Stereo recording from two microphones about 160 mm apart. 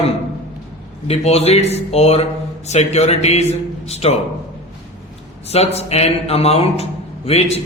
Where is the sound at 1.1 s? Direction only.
40° left (ahead or behind).